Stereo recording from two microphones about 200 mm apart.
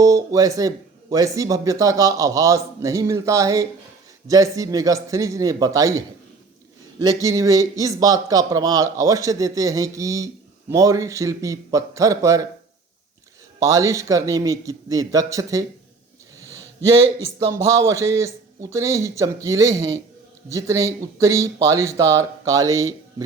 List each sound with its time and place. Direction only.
0.0 s speech: 15° right (ahead or behind)
7.0 s speech: 15° right (ahead or behind)
13.6 s speech: 15° right (ahead or behind)
17.2 s speech: 15° right (ahead or behind)